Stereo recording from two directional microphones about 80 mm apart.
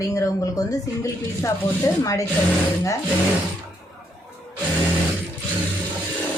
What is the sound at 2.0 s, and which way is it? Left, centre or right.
Speech, left.